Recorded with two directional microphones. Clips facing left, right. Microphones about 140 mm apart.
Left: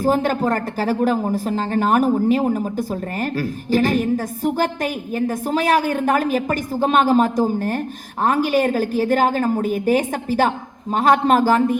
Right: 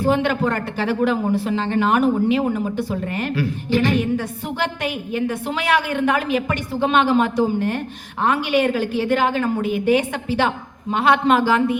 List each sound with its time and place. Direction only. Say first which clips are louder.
0.0 s a woman's voice: left 1 dB; 40° left (ahead or behind)